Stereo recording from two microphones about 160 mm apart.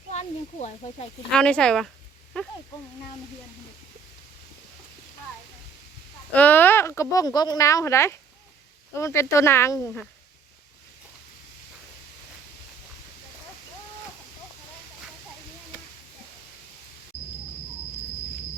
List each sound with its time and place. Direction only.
0.1 s snake: 45° left (ahead or behind)
1.3 s speech: 5° left (ahead or behind)
6.3 s speech: 10° left (ahead or behind)